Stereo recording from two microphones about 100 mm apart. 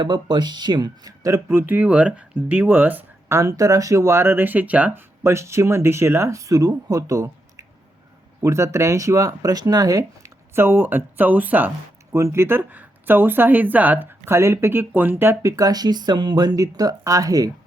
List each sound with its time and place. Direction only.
0.0 s speech: 45° right (ahead or behind)
1.5 s speech: 15° right (ahead or behind)
3.3 s speech: 35° right (ahead or behind); by 5.0 s 15° right (ahead or behind)
5.2 s speech: 25° right (ahead or behind)
12.1 s speech: 30° right (ahead or behind)